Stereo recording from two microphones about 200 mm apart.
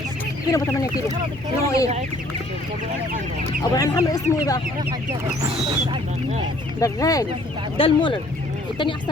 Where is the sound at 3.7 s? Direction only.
20° left (ahead or behind).